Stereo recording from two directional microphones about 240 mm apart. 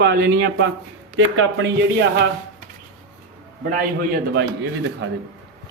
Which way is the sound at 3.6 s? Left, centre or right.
Right.